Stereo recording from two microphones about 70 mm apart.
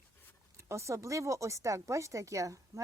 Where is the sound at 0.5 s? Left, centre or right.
Right.